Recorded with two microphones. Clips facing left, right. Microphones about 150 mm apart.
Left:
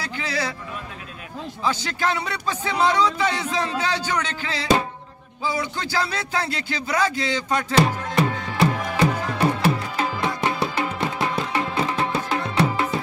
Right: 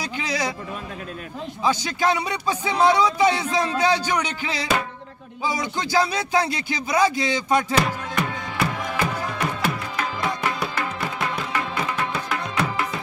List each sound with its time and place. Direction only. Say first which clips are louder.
0.0 s music: right 1 dB; 15° right (ahead or behind)
1.6 s speech: right 2 dB; 15° right (ahead or behind)
7.7 s music: left 3 dB; 30° left (ahead or behind)